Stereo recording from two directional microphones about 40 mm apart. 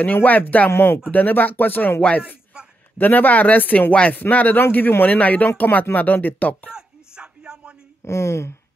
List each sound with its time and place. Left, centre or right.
0.0 s speech: left
0.7 s speech: left
1.1 s speech: left
2.0 s speech: left
2.5 s a sound: right
3.0 s speech: left
4.7 s a man's voice: left
5.0 s speech: left
5.9 s speech: left
6.7 s a sound: centre